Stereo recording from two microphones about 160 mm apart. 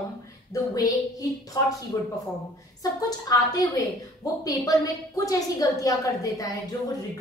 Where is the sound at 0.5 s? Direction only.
20° left (ahead or behind).